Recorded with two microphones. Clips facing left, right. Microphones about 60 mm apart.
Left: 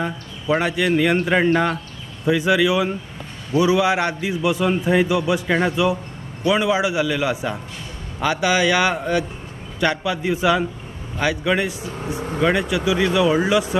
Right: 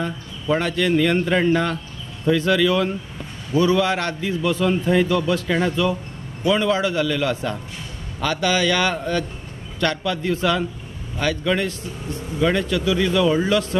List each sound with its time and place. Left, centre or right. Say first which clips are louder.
0.0 s a man's voice: left 1 dB; centre